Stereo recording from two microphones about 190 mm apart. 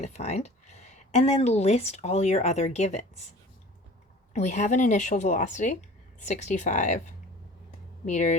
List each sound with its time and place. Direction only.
0.0 s speech: 35° left (ahead or behind)
4.4 s speech: 40° left (ahead or behind)
8.0 s speech: 40° left (ahead or behind)